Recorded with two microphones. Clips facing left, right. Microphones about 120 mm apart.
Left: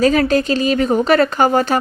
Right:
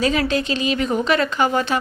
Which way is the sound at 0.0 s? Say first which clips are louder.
Left 6 dB; 45° left (ahead or behind).